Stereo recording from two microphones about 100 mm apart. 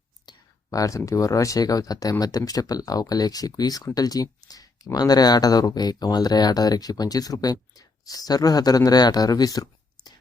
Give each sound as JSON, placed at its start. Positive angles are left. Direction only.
{"t": 0.3, "sound": "speech", "side_deg": 35}